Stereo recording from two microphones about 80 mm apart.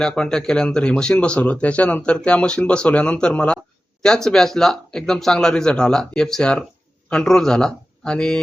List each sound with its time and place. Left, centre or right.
0.0 s speech: centre